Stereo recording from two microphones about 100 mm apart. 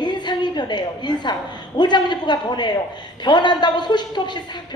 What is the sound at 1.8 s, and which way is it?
A woman's voice, 50° left (ahead or behind).